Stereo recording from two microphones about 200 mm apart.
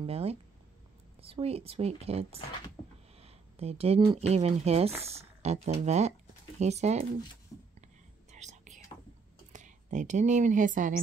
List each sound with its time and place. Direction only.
0.0 s a woman's voice: 30° right (ahead or behind)
8.3 s whispering: 35° right (ahead or behind)
9.5 s speech: 40° right (ahead or behind)